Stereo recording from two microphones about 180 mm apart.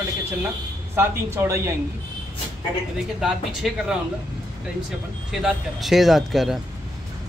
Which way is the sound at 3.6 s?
Centre (ahead or behind).